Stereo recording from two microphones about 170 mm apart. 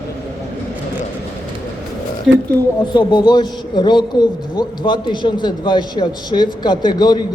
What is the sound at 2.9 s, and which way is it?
A man's voice, 25° left (ahead or behind).